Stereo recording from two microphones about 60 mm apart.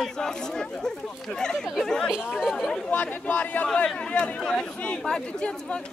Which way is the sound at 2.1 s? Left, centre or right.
Centre.